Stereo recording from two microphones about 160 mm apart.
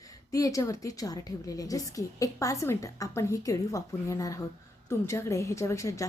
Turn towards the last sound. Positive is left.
turn(degrees=20)  # may be behind; listen again after turning